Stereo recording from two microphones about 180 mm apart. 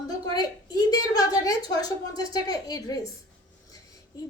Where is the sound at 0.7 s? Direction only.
20° left (ahead or behind).